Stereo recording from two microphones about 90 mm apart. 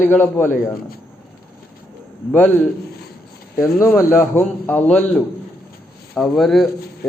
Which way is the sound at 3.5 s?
35° left (ahead or behind).